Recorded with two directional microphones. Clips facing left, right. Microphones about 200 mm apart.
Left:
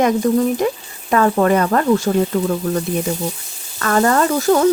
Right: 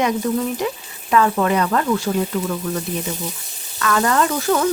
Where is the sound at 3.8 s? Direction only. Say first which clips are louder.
Left 3 dB; 40° left (ahead or behind).